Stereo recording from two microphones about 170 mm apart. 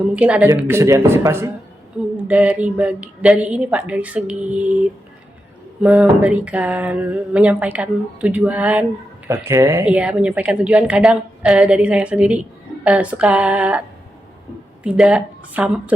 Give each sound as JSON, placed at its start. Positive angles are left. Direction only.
{"t": 0.2, "sound": "speech", "side_deg": -5}
{"t": 14.8, "sound": "speech", "side_deg": -5}